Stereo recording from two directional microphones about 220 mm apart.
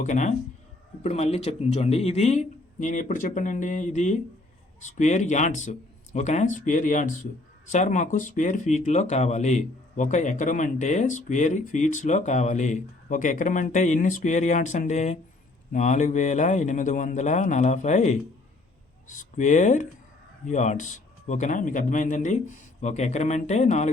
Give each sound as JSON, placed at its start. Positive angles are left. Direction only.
{"t": 0.0, "sound": "speech", "side_deg": 35}